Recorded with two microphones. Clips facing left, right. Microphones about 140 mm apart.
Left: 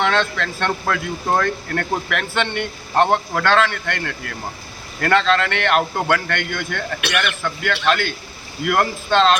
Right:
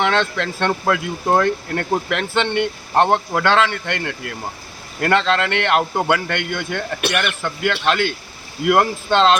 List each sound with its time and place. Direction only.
0.0 s a man's voice: 20° right (ahead or behind)